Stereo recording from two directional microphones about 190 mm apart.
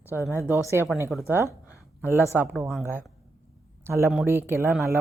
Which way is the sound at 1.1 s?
Centre (ahead or behind).